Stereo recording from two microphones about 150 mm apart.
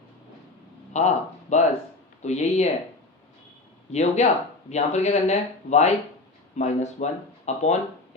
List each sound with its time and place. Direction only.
0.9 s speech: 50° left (ahead or behind)
3.9 s speech: 50° left (ahead or behind)